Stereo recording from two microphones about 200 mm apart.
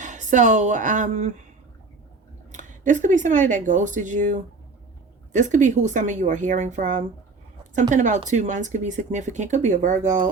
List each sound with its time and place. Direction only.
0.0 s speech: 40° right (ahead or behind)
2.5 s speech: 40° right (ahead or behind)